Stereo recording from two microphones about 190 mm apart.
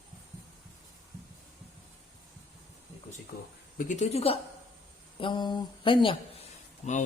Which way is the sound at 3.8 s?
40° left (ahead or behind).